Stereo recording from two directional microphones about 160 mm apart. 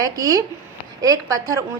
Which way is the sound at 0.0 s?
20° right (ahead or behind).